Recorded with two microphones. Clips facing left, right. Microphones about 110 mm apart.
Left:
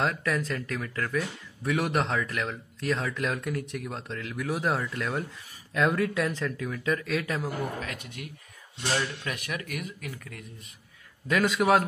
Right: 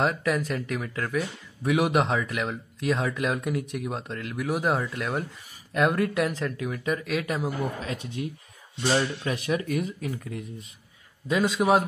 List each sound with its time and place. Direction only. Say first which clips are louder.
0.0 s speech: right 3 dB; 10° right (ahead or behind)
7.2 s speech: right 2 dB; 20° right (ahead or behind)